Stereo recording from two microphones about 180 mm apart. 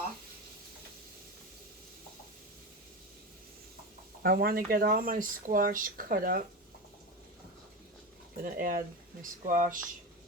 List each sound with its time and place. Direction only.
4.2 s speech: 55° right (ahead or behind)
8.4 s speech: 50° right (ahead or behind)